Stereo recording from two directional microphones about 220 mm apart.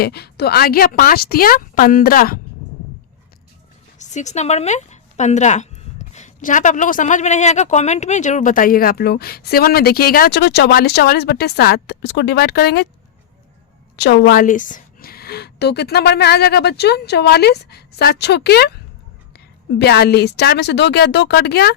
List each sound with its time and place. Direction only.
0.0 s a woman's voice: 45° left (ahead or behind)
3.9 s a woman's voice: 35° left (ahead or behind)
13.9 s a woman's voice: 45° left (ahead or behind)
19.8 s a woman's voice: 45° left (ahead or behind)